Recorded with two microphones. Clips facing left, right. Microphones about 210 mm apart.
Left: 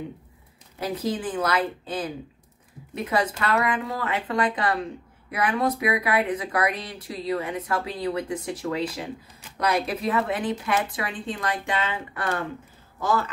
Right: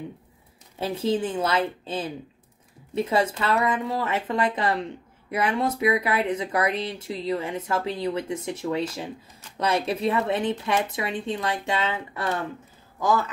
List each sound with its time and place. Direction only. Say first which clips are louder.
0.7 s speech: right 3 dB; 25° right (ahead or behind)